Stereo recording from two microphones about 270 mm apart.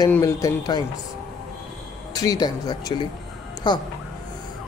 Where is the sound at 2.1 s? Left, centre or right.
Centre.